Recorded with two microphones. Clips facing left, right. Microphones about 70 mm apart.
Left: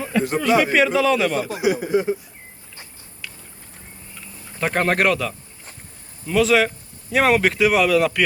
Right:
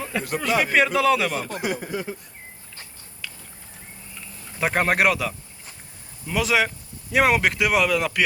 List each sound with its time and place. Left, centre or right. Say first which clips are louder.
0.2 s speech: left 8 dB; centre
0.6 s speech: left 2 dB; centre
1.9 s speech: left 10 dB; left
4.6 s speech: left 1 dB; centre